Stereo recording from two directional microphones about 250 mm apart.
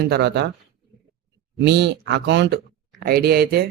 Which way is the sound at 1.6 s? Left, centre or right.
Right.